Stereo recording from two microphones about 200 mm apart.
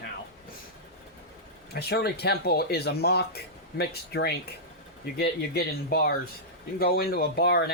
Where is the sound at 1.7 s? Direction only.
55° left (ahead or behind).